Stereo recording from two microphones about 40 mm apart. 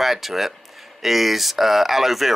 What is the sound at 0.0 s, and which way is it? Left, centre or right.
Speech, centre.